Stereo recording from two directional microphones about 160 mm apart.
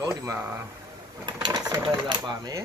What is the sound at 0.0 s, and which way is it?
Speech, 20° right (ahead or behind).